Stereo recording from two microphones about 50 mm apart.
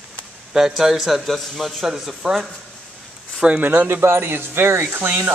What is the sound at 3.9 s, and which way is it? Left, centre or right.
Speech, right.